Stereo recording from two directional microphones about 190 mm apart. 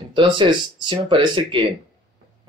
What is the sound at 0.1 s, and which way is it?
Speech, 25° right (ahead or behind).